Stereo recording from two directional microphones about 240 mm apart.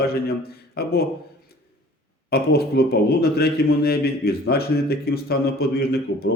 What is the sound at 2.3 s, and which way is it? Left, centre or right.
A man's voice, left.